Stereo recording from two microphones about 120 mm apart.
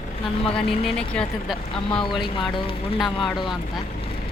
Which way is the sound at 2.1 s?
45° left (ahead or behind).